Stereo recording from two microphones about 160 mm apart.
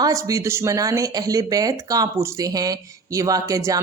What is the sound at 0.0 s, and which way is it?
Speech, 20° right (ahead or behind).